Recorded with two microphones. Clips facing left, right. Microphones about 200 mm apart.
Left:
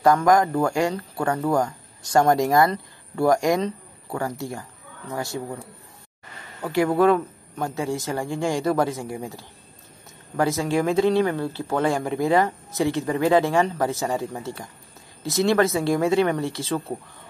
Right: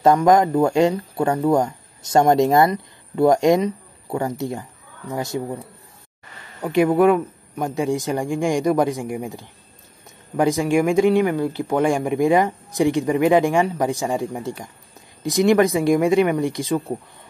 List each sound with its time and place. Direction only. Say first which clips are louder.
0.0 s speech: right 3 dB; 20° right (ahead or behind)
6.6 s speech: right 3 dB; 20° right (ahead or behind)